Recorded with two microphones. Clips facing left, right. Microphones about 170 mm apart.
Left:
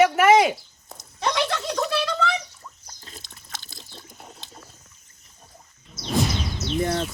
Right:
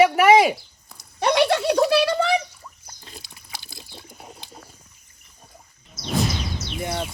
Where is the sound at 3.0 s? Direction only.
Centre (ahead or behind).